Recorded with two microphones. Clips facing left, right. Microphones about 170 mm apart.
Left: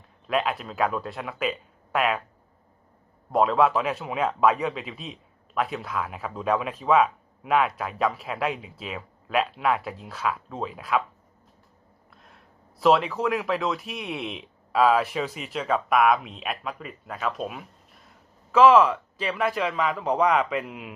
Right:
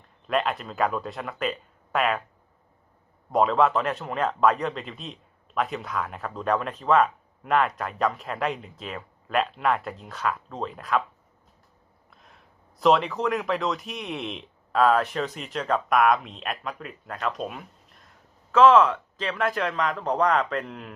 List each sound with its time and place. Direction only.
0.3 s speech: centre (ahead or behind)
3.3 s speech: centre (ahead or behind)
12.1 s speech: centre (ahead or behind)